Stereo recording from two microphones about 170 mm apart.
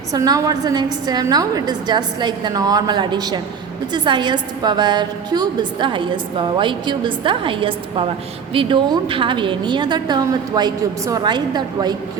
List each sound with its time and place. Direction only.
0.1 s a woman's voice: 20° right (ahead or behind)